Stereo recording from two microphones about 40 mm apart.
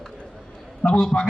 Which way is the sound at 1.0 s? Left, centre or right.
Left.